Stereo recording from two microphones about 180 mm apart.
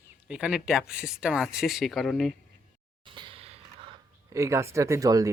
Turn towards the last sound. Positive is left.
turn(degrees=-20)  # may be behind; listen again after turning